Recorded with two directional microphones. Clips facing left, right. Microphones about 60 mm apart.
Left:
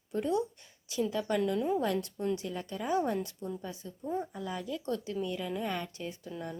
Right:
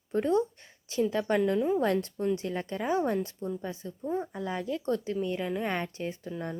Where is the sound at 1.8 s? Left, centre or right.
Right.